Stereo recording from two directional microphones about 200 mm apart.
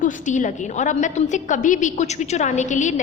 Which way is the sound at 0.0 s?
40° left (ahead or behind).